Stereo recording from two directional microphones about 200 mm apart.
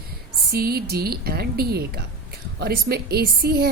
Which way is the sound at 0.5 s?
50° right (ahead or behind).